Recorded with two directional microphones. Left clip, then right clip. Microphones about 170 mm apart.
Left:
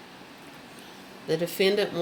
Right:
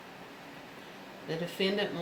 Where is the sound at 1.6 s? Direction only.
50° left (ahead or behind).